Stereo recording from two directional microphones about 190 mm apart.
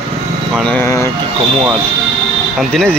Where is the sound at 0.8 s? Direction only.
15° left (ahead or behind).